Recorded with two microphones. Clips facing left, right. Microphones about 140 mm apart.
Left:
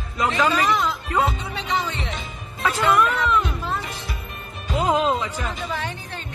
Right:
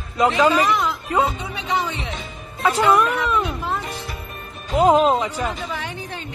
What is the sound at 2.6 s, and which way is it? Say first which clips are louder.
Speech: right 3 dB; 15° right (ahead or behind).